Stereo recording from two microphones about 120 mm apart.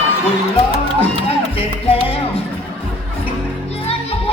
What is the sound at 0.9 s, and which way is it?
Music, 55° left (ahead or behind).